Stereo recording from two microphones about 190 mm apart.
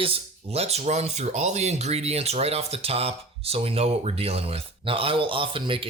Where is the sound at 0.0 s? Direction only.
30° right (ahead or behind).